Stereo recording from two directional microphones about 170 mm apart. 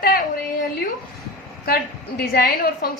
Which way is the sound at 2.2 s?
65° left (ahead or behind).